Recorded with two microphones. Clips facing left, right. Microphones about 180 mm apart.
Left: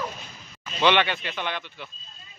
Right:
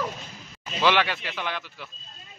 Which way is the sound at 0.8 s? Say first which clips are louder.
Left 1 dB; centre (ahead or behind).